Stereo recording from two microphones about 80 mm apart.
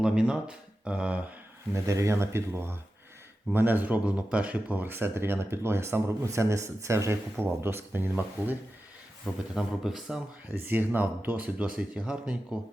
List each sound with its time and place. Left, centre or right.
0.0 s speech: centre
1.7 s speech: right
9.6 s speech: centre
10.5 s speech: right